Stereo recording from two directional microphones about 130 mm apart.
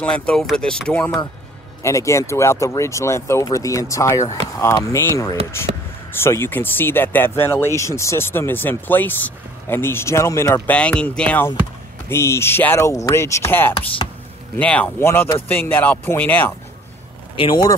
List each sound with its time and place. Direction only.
0.0 s speech: 5° left (ahead or behind)
1.8 s speech: 25° left (ahead or behind)
14.0 s music: 35° left (ahead or behind)
14.6 s speech: 10° left (ahead or behind)
17.4 s speech: 40° left (ahead or behind)